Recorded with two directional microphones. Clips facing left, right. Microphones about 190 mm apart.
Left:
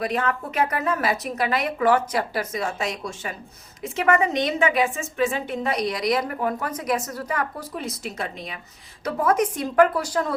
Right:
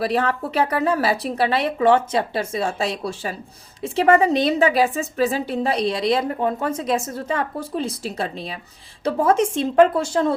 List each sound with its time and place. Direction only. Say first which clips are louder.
0.0 s a woman's voice: right 4 dB; 35° right (ahead or behind)